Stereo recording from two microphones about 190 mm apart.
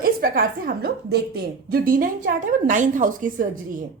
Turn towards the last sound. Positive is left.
turn(degrees=-45)  # may be behind; listen again after turning